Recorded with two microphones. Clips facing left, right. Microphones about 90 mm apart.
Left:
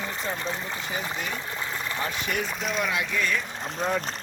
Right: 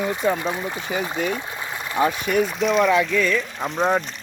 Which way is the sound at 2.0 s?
90° right.